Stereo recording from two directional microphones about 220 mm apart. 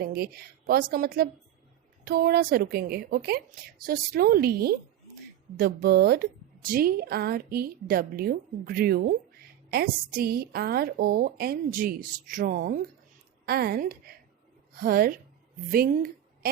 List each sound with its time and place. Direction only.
0.0 s a woman's voice: 45° right (ahead or behind)